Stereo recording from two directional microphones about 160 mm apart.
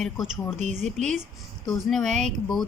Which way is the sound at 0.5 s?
45° right (ahead or behind).